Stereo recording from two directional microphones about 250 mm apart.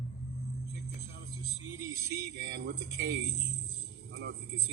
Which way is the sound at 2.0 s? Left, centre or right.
Right.